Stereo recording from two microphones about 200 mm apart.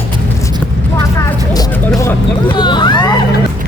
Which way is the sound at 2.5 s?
20° left (ahead or behind).